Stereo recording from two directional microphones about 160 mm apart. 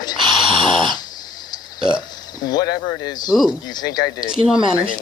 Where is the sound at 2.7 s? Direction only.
25° left (ahead or behind).